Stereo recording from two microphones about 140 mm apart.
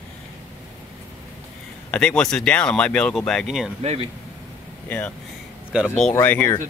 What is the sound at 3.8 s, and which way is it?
Speech, 45° right (ahead or behind).